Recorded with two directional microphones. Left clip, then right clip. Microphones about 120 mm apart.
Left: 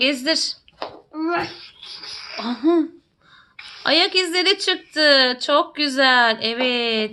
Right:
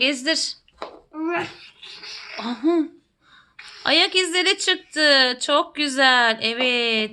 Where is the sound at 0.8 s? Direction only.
30° left (ahead or behind).